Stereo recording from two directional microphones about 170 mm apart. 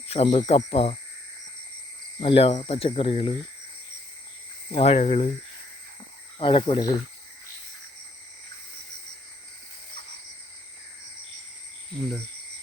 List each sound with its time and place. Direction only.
0.1 s speech: 40° left (ahead or behind)
2.2 s speech: 35° left (ahead or behind)
4.8 s speech: 40° left (ahead or behind)
6.4 s speech: 30° left (ahead or behind)